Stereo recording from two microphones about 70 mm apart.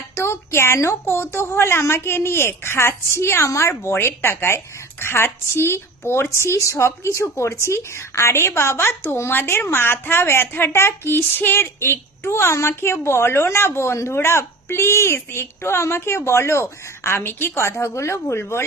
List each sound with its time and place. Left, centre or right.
0.1 s a woman's voice: left